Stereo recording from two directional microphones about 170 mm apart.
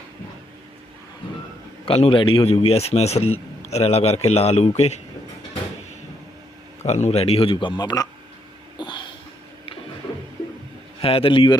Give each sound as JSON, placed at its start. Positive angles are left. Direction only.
{"t": 1.8, "sound": "a man's voice", "side_deg": 35}
{"t": 6.8, "sound": "a man's voice", "side_deg": 40}
{"t": 8.8, "sound": "a sound", "side_deg": 30}
{"t": 11.0, "sound": "a man's voice", "side_deg": 35}